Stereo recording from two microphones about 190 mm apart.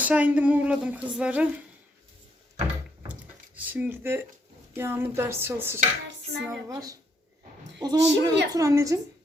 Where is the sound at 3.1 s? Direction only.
10° right (ahead or behind).